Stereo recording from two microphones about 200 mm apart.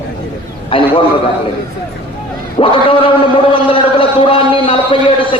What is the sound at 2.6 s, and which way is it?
A man's voice, 25° left (ahead or behind).